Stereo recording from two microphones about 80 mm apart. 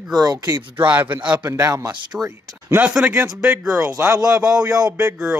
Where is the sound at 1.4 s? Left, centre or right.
Right.